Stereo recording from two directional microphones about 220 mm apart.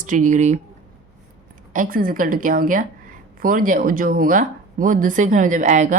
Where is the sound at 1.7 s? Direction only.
40° right (ahead or behind).